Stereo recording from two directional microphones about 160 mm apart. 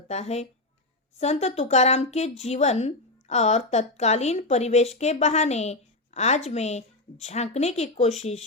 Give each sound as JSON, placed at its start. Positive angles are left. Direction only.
{"t": 0.1, "sound": "a woman's voice", "side_deg": 40}